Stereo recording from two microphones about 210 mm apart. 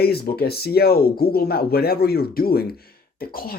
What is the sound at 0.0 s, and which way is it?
Speech, 50° left (ahead or behind).